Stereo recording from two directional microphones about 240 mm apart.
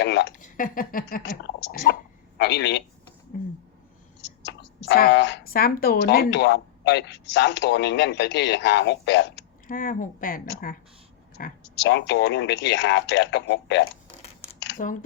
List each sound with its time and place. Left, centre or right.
0.0 s speech: left
0.4 s a man's voice: left
4.2 s speech: left
14.6 s a sound: left